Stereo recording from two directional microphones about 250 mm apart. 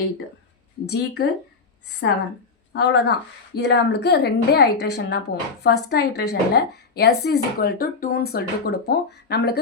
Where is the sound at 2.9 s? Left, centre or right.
Left.